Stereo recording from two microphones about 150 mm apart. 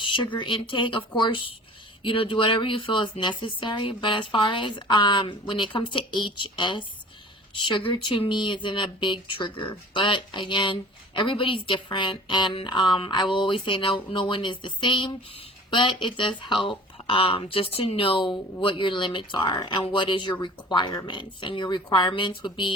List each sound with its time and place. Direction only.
0.0 s speech: 35° left (ahead or behind)